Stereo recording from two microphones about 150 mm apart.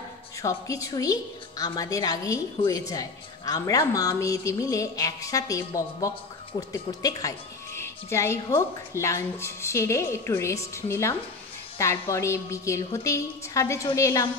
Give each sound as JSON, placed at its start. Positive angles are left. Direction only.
{"t": 0.4, "sound": "speech", "side_deg": 20}